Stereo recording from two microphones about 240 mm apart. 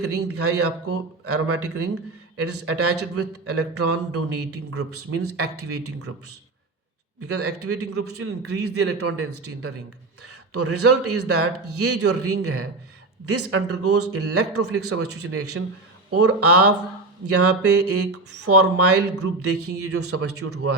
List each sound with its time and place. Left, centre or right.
0.3 s speech: right
7.2 s a man's voice: right